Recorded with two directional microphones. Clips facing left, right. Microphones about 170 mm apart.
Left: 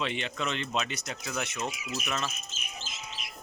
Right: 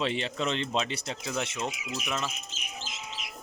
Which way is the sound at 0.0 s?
30° right (ahead or behind).